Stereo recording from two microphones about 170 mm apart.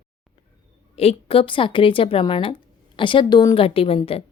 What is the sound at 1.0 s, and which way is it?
A woman's voice, 35° left (ahead or behind).